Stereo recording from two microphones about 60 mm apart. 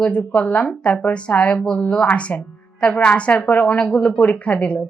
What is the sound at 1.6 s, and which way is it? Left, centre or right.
A woman's voice, centre.